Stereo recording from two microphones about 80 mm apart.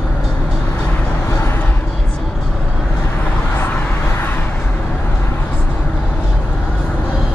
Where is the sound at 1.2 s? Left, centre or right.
Left.